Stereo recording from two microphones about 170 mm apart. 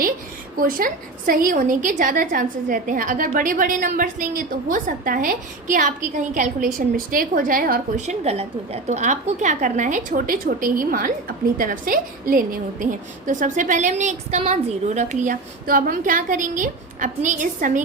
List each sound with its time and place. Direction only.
0.5 s a woman's voice: 55° right (ahead or behind)